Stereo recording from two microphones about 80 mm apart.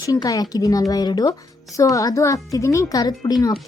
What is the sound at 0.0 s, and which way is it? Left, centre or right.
A woman's voice, left.